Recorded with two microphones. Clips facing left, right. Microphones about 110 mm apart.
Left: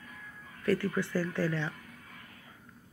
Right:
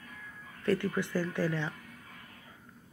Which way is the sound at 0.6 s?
25° right (ahead or behind).